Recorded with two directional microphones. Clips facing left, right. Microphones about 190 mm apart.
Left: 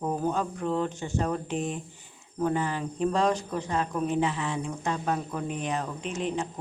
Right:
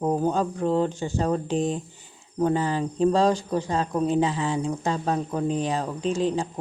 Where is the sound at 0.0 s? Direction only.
30° right (ahead or behind).